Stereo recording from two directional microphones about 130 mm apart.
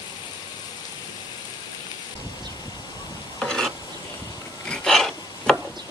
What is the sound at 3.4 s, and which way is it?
Stir, 5° left (ahead or behind).